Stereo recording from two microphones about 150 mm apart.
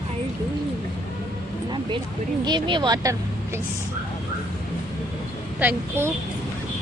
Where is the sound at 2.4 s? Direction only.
30° right (ahead or behind).